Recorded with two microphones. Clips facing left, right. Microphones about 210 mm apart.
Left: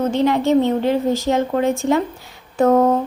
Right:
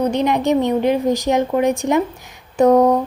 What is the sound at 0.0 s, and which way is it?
A woman's voice, 15° right (ahead or behind).